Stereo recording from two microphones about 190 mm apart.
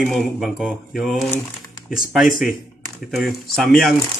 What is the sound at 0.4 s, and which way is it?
A man's voice, centre (ahead or behind).